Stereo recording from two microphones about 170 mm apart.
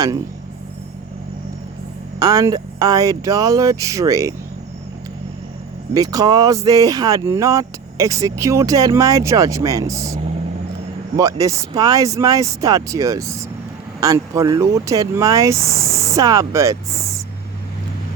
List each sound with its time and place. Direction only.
2.1 s speech: 20° right (ahead or behind)
5.9 s speech: 20° right (ahead or behind)
11.2 s speech: 20° right (ahead or behind)